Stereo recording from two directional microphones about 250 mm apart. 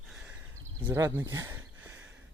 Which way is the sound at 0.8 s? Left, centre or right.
Centre.